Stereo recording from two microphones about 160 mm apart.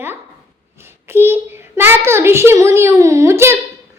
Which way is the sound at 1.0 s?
15° right (ahead or behind).